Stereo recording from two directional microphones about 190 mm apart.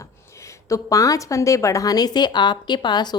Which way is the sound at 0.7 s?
15° left (ahead or behind).